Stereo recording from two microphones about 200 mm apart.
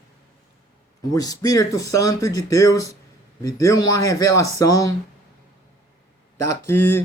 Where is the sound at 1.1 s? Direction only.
20° left (ahead or behind).